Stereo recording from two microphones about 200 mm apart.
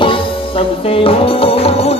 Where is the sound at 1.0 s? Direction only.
30° left (ahead or behind).